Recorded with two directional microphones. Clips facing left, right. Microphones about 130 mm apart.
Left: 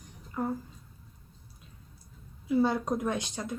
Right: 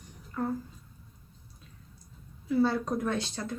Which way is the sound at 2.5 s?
15° left (ahead or behind).